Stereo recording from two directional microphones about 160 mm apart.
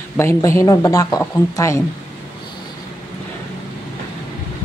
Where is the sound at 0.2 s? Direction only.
15° left (ahead or behind).